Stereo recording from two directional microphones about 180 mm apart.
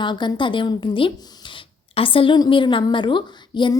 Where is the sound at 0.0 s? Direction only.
25° left (ahead or behind).